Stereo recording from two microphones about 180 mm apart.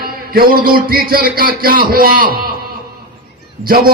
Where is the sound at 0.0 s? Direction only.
55° right (ahead or behind).